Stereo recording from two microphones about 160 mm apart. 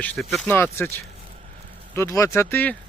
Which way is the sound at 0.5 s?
15° left (ahead or behind).